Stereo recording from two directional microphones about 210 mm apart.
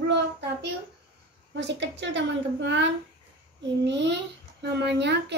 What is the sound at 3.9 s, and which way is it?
Child singing, 55° right (ahead or behind).